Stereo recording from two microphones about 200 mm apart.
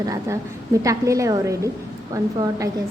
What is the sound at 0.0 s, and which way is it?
A woman's voice, 15° right (ahead or behind).